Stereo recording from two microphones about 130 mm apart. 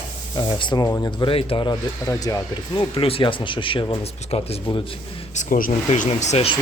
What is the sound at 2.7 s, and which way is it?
Speech, 40° left (ahead or behind).